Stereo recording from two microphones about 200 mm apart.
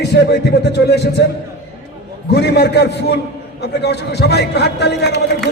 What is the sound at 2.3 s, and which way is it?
A man's voice, 55° left (ahead or behind).